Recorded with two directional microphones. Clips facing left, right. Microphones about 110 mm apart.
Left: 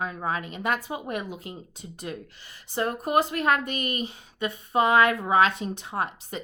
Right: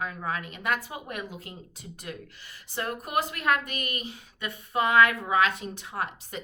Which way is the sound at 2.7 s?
30° left (ahead or behind).